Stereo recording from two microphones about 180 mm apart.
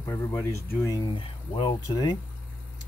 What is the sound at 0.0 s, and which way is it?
Speech, 15° left (ahead or behind).